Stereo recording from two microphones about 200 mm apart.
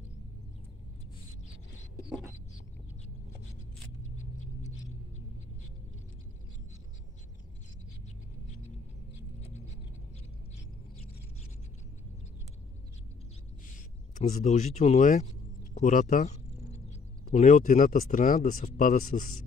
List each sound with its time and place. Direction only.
14.1 s speech: 35° left (ahead or behind)